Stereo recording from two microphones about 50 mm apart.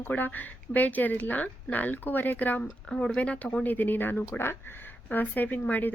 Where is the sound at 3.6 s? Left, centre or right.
Left.